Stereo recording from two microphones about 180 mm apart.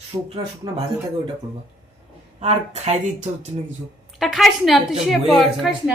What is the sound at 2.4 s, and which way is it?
Speech, 35° right (ahead or behind).